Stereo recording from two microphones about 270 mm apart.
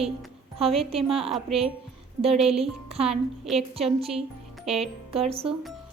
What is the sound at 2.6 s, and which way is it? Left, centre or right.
Speech, right.